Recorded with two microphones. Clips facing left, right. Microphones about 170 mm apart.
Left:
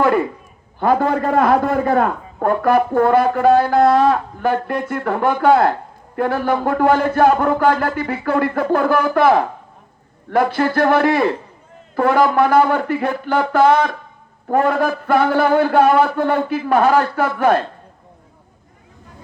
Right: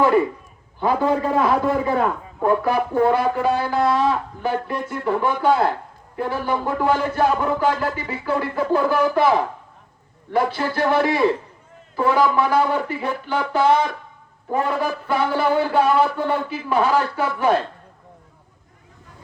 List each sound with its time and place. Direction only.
0.8 s a man's voice: 55° left (ahead or behind)